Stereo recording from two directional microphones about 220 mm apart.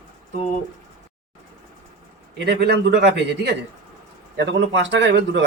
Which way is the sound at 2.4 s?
50° right (ahead or behind).